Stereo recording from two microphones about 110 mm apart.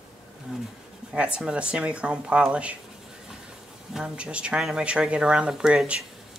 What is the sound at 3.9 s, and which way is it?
Speech, 10° right (ahead or behind).